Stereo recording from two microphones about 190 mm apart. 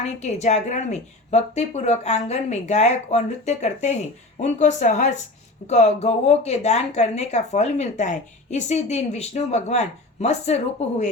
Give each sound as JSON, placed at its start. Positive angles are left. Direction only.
{"t": 0.0, "sound": "speech", "side_deg": 35}